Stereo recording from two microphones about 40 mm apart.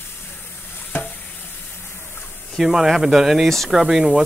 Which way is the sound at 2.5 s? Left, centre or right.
Centre.